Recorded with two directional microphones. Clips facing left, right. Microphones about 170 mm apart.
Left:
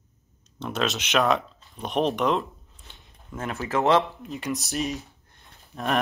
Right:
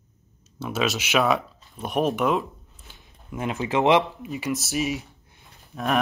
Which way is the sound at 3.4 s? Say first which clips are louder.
Right 2 dB; 15° right (ahead or behind).